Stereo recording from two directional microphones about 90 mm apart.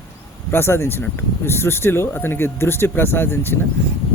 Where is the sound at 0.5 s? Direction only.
25° left (ahead or behind).